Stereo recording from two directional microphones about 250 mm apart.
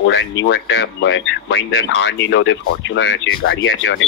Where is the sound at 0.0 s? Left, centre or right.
Left.